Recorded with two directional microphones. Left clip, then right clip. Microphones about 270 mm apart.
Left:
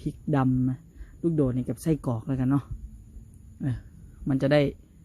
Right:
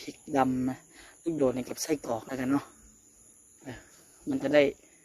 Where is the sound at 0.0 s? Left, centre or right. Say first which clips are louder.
Even; centre.